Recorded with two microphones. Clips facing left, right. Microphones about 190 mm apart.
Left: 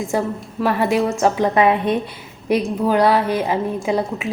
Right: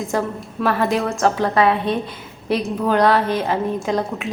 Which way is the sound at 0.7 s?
15° left (ahead or behind).